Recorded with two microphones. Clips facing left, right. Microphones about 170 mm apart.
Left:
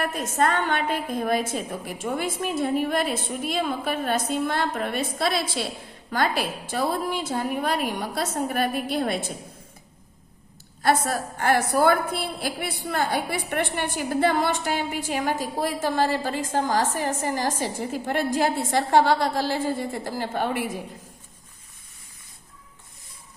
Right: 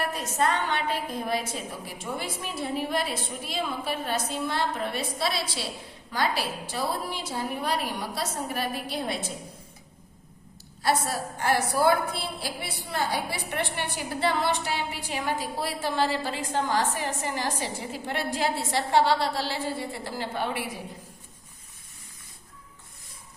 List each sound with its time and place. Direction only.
0.1 s a woman's voice: 50° left (ahead or behind)
10.8 s a woman's voice: 55° left (ahead or behind)